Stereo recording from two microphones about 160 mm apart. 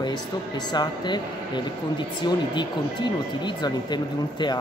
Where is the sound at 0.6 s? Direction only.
25° left (ahead or behind).